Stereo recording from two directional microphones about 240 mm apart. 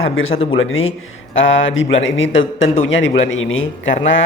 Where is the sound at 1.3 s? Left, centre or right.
Left.